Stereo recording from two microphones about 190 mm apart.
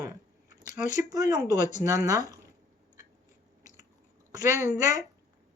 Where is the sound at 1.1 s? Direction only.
20° right (ahead or behind).